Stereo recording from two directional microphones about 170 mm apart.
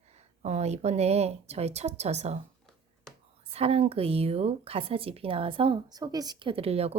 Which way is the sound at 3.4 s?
35° right (ahead or behind).